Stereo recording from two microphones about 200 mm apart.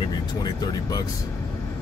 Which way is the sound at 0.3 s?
20° left (ahead or behind).